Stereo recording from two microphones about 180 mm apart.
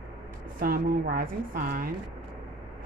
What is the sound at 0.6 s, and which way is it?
Speech, 50° right (ahead or behind).